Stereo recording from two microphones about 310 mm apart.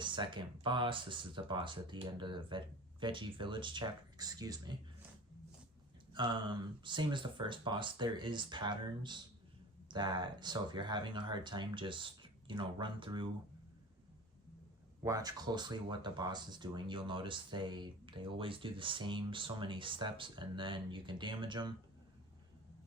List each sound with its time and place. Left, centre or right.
0.0 s speech: centre
6.1 s speech: centre
15.0 s speech: centre